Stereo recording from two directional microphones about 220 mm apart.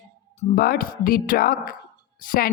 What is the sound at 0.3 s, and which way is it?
Speech, 40° left (ahead or behind).